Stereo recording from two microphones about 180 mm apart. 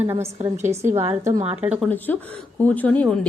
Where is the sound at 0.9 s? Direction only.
35° right (ahead or behind).